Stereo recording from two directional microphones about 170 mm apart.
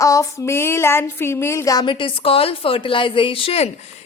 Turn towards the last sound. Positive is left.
turn(degrees=35)  # may be behind; listen again after turning